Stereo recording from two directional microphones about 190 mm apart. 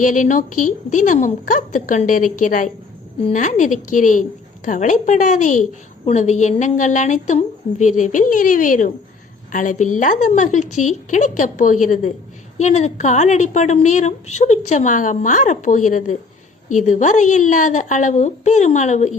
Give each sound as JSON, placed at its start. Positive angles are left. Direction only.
{"t": 0.0, "sound": "a woman's voice", "side_deg": 45}